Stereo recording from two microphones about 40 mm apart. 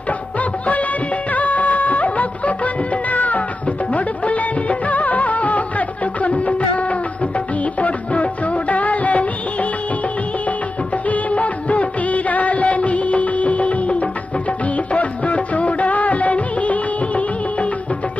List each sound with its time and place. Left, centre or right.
0.1 s music of bollywood: left
10.9 s music of bollywood: left
14.6 s music: left